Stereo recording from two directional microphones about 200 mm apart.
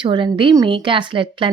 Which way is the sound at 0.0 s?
25° right (ahead or behind).